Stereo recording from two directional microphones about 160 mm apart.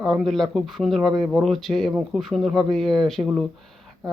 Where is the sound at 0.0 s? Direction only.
Centre (ahead or behind).